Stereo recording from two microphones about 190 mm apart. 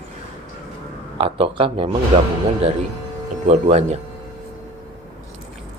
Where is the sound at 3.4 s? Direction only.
35° right (ahead or behind).